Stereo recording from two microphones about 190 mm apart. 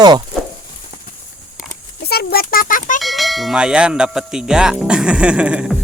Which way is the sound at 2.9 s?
Centre (ahead or behind).